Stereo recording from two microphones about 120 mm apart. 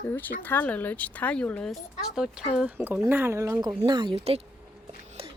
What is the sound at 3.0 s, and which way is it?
Speech, 20° right (ahead or behind).